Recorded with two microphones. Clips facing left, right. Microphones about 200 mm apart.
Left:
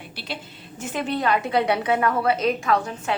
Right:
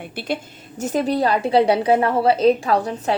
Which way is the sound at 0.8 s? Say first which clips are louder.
Right 6 dB; 40° right (ahead or behind).